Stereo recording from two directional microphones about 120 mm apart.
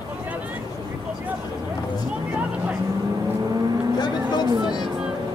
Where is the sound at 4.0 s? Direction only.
35° left (ahead or behind).